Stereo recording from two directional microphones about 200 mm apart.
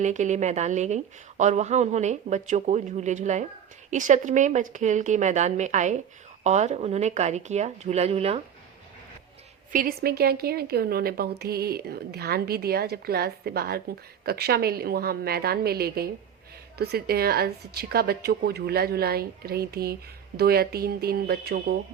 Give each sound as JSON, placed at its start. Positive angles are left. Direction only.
{"t": 0.0, "sound": "a woman's voice", "side_deg": -35}
{"t": 9.7, "sound": "a woman's voice", "side_deg": -50}